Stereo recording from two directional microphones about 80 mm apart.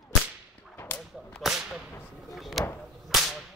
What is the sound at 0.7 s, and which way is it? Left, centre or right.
Whip, left.